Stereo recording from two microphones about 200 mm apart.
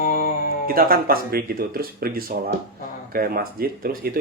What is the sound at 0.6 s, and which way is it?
Speech, 45° right (ahead or behind).